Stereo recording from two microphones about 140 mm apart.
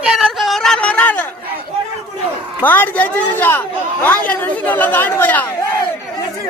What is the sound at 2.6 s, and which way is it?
Speech, 10° left (ahead or behind).